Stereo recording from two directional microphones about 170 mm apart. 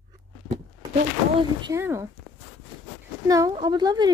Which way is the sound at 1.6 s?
15° right (ahead or behind).